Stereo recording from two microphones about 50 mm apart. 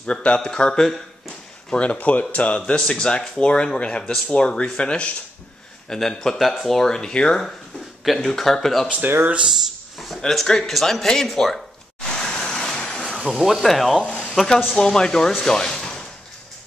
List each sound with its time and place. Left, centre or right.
0.0 s speech: left
1.8 s speech: left
5.9 s speech: centre
8.3 s speech: centre
9.0 s speech: right
9.5 s a sound: centre
10.2 s speech: centre
12.1 s vehicle: centre
13.2 s speech: centre
14.0 s a sound: left
14.3 s speech: centre
14.8 s speech: centre